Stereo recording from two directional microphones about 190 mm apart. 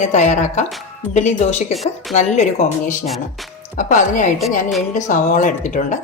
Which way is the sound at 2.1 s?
35° left (ahead or behind).